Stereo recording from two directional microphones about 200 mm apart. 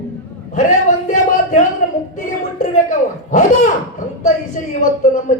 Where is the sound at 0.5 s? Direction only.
40° left (ahead or behind).